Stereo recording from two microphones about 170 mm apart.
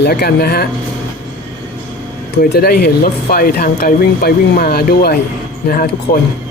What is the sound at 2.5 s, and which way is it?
Speech, 70° left (ahead or behind).